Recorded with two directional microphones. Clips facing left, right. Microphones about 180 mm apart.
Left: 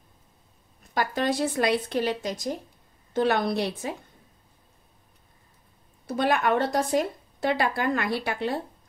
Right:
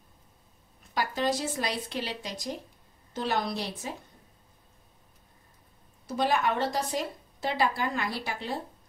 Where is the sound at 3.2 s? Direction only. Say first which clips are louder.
Left 7 dB; 60° left (ahead or behind).